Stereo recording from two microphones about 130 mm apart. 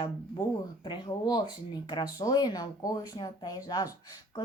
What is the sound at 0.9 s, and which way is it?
Speech, 35° left (ahead or behind).